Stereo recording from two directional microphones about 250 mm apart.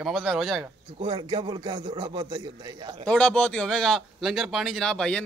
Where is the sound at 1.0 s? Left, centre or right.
Centre.